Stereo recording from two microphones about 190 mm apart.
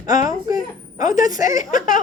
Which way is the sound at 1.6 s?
45° left (ahead or behind).